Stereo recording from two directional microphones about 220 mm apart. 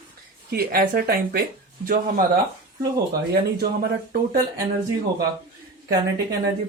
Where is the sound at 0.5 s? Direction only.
45° right (ahead or behind).